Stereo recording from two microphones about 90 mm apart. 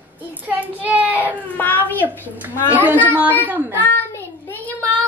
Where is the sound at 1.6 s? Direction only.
20° left (ahead or behind).